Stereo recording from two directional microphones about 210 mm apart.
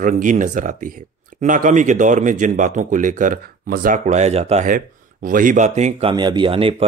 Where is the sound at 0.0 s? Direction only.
40° right (ahead or behind).